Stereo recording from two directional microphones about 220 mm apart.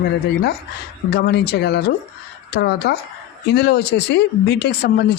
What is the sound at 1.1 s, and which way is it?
Speech, 50° left (ahead or behind).